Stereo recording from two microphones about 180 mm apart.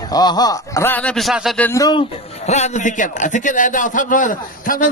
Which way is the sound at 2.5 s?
40° left (ahead or behind).